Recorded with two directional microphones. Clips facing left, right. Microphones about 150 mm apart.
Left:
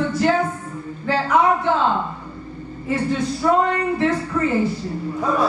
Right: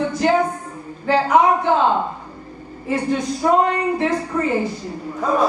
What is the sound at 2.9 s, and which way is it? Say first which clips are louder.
A woman's voice: right 1 dB; 15° right (ahead or behind).